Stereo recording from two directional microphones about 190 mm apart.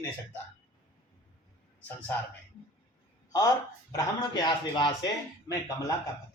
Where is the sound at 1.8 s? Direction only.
10° left (ahead or behind).